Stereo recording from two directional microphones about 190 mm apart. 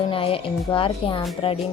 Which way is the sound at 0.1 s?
30° left (ahead or behind).